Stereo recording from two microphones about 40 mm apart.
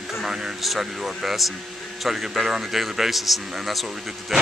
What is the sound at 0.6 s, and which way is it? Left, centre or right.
A man's voice, centre.